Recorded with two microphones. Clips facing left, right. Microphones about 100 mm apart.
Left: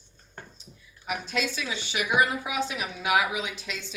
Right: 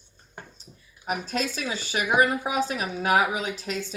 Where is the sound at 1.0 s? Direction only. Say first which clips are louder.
Right 2 dB; 40° right (ahead or behind).